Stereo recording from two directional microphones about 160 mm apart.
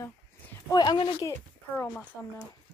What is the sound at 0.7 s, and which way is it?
Speech, 25° left (ahead or behind).